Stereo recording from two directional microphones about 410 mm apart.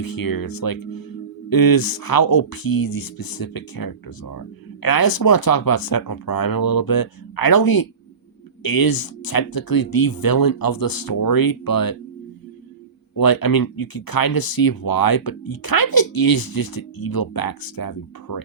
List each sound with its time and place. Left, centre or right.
0.0 s speech: left
13.1 s speech: left